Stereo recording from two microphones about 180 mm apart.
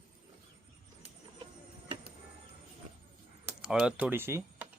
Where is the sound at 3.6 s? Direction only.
5° right (ahead or behind).